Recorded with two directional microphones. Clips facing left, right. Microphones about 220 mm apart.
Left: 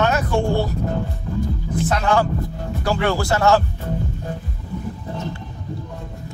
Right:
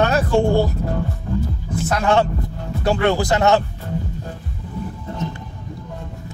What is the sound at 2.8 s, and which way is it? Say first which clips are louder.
Speech: right 3 dB; 25° right (ahead or behind).